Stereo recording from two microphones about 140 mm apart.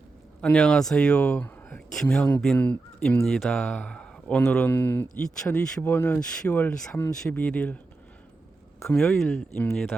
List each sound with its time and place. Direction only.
0.4 s speech: 5° left (ahead or behind)
5.4 s speech: 5° left (ahead or behind)
8.9 s speech: 5° left (ahead or behind)